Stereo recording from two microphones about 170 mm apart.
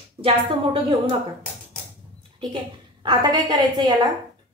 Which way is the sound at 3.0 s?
25° right (ahead or behind).